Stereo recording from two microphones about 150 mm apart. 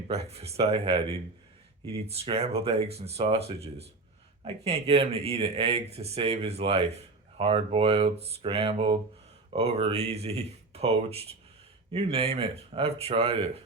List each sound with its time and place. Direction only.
0.1 s speech: 45° right (ahead or behind)